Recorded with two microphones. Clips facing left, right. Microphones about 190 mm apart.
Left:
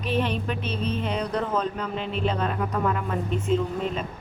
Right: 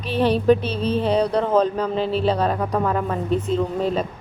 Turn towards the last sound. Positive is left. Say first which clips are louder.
# right 4 dB
turn(degrees=-35)  # may be behind; listen again after turning